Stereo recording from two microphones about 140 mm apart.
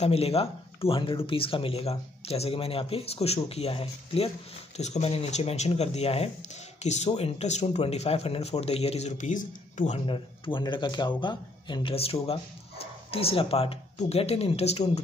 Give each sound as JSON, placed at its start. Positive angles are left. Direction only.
{"t": 0.0, "sound": "speech", "side_deg": 45}
{"t": 9.9, "sound": "speech", "side_deg": 40}